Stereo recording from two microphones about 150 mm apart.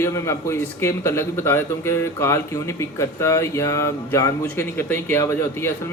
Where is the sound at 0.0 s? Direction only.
20° left (ahead or behind).